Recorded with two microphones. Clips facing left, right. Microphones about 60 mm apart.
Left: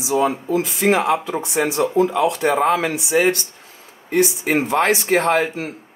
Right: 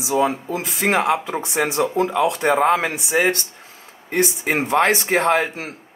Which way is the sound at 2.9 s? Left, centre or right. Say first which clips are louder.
Left 2 dB; right.